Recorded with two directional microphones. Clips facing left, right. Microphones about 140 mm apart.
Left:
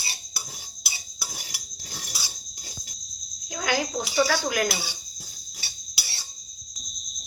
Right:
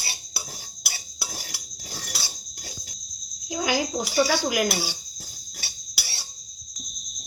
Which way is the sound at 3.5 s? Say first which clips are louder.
Right 2 dB; 15° right (ahead or behind).